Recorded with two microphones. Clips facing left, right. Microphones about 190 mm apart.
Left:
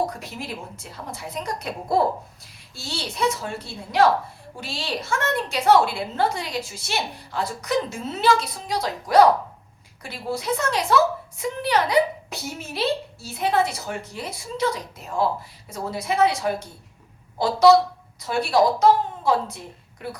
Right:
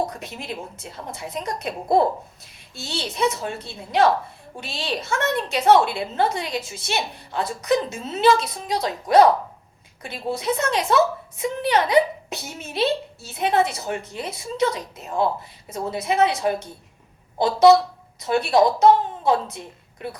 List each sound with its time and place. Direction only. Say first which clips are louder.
0.0 s a woman's voice: even; 20° right (ahead or behind)